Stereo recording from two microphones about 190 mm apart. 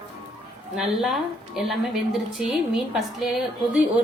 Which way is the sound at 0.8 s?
Centre (ahead or behind).